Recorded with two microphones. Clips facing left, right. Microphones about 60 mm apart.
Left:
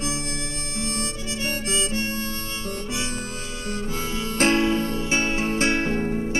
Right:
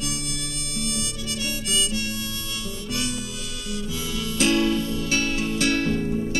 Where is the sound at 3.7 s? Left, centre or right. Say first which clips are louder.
Left 2 dB; left.